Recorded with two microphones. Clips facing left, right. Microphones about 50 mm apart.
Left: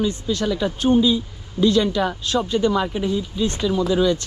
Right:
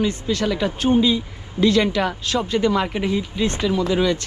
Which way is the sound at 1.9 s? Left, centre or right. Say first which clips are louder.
Even; right.